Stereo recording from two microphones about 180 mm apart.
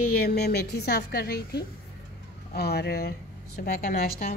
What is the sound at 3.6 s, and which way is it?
Speech, 40° left (ahead or behind).